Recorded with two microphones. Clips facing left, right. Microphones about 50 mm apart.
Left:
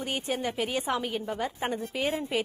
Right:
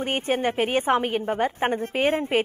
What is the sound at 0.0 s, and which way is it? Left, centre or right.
A woman's voice, right.